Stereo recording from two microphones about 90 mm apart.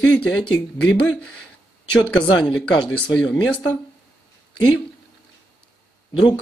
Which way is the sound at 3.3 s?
15° left (ahead or behind).